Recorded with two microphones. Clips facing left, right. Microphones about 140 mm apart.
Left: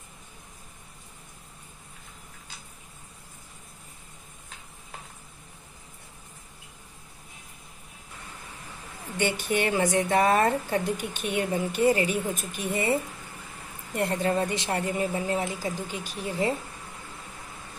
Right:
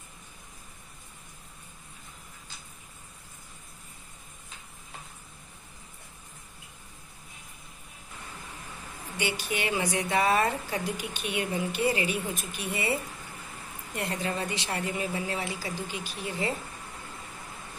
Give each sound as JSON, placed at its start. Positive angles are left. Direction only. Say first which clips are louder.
{"t": 9.2, "sound": "speech", "louder": "left 5 dB", "side_deg": 50}